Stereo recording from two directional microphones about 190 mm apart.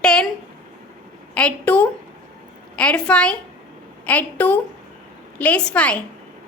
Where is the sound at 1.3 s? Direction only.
5° left (ahead or behind).